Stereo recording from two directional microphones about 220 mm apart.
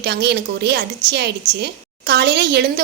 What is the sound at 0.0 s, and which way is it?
A woman's voice, 50° right (ahead or behind).